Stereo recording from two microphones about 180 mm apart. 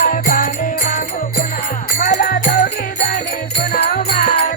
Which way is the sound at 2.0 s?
50° left (ahead or behind).